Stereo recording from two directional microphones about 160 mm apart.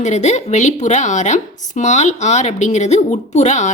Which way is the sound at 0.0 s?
45° left (ahead or behind).